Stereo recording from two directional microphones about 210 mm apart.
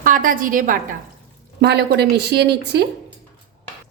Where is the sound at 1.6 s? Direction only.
50° right (ahead or behind).